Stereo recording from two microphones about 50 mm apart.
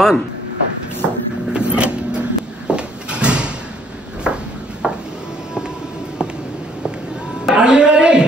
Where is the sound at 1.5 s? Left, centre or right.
Right.